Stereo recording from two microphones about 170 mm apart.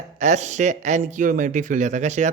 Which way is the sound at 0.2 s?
45° right (ahead or behind).